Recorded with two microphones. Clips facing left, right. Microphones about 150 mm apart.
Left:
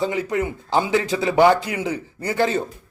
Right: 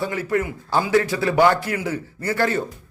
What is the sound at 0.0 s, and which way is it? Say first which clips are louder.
A man's voice: left 1 dB; 20° left (ahead or behind).